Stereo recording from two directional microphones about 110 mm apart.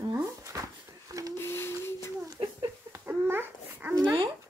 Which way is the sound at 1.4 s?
20° left (ahead or behind).